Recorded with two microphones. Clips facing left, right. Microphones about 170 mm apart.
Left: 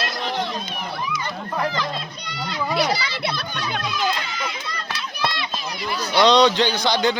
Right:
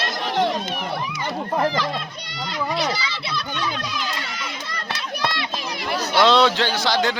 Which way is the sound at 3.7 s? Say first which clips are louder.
Left 4 dB; 65° left (ahead or behind).